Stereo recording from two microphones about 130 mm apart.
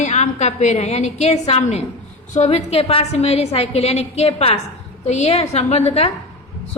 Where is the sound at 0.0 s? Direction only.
65° left (ahead or behind).